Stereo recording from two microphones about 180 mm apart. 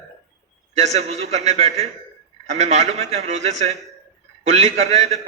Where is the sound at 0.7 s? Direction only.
35° right (ahead or behind).